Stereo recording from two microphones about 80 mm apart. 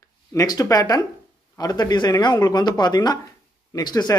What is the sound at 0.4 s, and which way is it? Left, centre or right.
Speech, left.